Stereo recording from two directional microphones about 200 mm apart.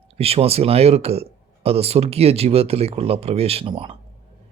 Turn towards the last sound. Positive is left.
turn(degrees=-25)  # may be behind; listen again after turning